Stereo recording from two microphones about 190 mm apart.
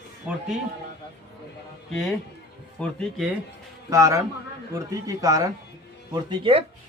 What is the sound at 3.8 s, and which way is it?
Speech, 15° right (ahead or behind).